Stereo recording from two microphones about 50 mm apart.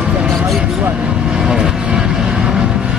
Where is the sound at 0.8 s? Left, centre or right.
Centre.